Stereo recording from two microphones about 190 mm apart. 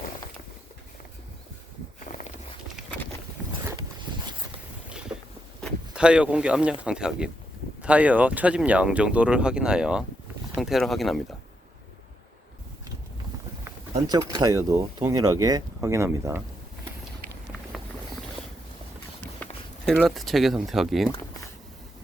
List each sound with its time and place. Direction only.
4.9 s a sound: 5° right (ahead or behind)
5.6 s speech: 5° right (ahead or behind)
13.9 s speech: 20° right (ahead or behind)
19.4 s speech: centre (ahead or behind)